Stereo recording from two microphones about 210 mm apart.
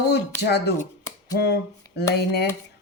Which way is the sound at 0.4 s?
50° left (ahead or behind).